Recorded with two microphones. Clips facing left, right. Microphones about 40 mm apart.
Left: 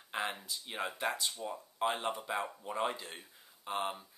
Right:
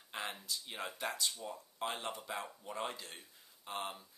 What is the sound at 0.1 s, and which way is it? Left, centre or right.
Speech, centre.